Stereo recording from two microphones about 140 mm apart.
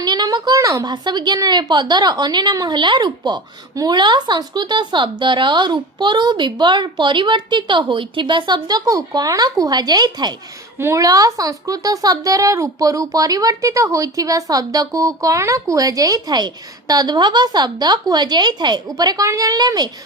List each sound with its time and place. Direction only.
0.0 s a woman's voice: 30° right (ahead or behind)